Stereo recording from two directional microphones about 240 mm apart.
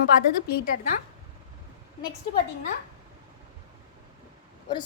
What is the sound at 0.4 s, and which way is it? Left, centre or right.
Speech, left.